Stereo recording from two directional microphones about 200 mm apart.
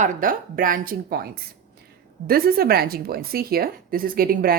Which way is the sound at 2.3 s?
50° right (ahead or behind).